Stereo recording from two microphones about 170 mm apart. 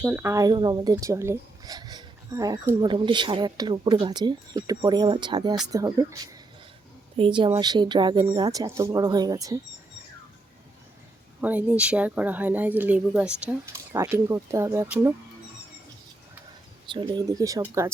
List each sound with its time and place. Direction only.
0.1 s speech: 15° right (ahead or behind)
7.2 s speech: 30° right (ahead or behind)
11.3 s speech: 10° right (ahead or behind)
16.9 s speech: 25° right (ahead or behind)